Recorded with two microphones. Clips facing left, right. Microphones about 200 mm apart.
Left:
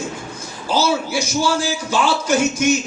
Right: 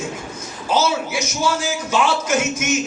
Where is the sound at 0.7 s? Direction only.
35° left (ahead or behind).